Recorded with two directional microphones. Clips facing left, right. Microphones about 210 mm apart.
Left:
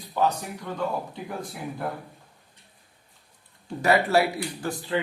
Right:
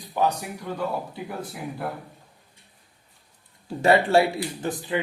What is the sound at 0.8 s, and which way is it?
A man's voice, 5° right (ahead or behind).